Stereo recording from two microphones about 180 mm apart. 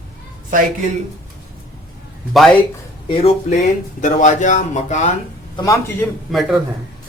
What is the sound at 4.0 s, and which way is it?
Speech, 45° left (ahead or behind).